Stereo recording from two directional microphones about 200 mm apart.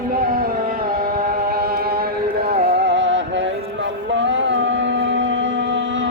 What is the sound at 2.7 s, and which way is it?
Music, 60° right (ahead or behind).